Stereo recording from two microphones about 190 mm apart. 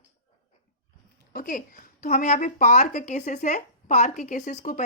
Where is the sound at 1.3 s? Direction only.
50° left (ahead or behind).